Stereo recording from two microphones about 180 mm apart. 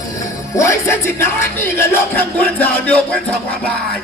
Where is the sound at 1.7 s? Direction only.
10° left (ahead or behind).